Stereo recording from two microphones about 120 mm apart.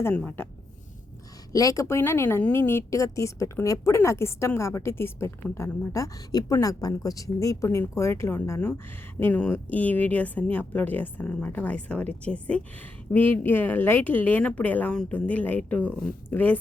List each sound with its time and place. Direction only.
1.5 s a woman's voice: 30° left (ahead or behind)